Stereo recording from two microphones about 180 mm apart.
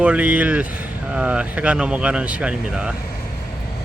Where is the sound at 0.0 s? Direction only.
5° right (ahead or behind).